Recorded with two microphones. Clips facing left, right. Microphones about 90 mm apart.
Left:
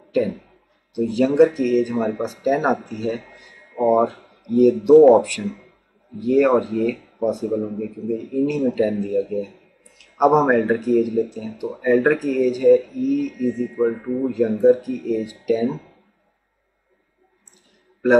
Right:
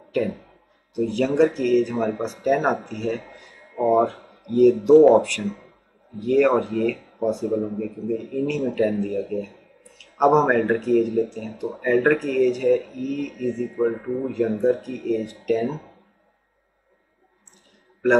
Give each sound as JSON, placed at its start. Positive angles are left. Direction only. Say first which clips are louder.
{"t": 0.9, "sound": "speech", "louder": "left 4 dB", "side_deg": 5}
{"t": 13.9, "sound": "speech", "louder": "left 2 dB", "side_deg": -20}
{"t": 14.2, "sound": "speech", "louder": "left 6 dB", "side_deg": 0}